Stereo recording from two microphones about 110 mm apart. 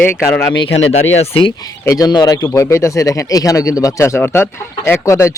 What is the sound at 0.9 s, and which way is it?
Speech, 65° left (ahead or behind).